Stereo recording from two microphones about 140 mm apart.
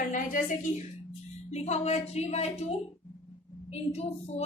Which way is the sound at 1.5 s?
50° left (ahead or behind).